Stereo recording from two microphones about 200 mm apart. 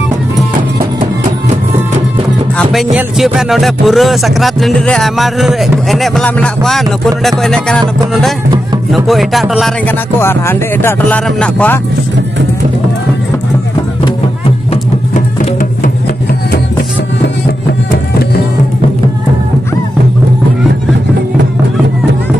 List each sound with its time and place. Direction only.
2.5 s speech: centre (ahead or behind)
8.9 s speech: centre (ahead or behind)
10.2 s speech: 10° left (ahead or behind)